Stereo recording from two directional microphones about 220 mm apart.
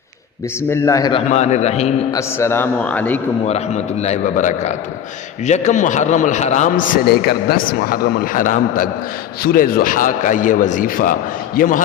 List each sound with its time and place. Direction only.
0.7 s a man's voice: 15° left (ahead or behind)
1.3 s a man's voice: 30° left (ahead or behind)
2.1 s a man's voice: 10° left (ahead or behind)
4.0 s a man's voice: 30° left (ahead or behind)